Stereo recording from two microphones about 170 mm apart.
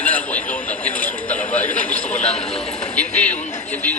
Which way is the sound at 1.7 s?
45° left (ahead or behind).